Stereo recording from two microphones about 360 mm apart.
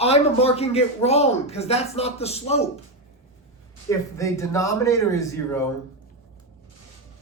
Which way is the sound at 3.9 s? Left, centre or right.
Centre.